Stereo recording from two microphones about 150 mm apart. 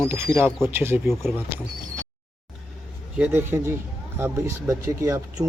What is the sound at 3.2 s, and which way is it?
Speech, 15° right (ahead or behind).